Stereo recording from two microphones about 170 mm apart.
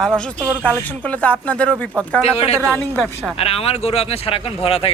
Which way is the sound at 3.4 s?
35° left (ahead or behind).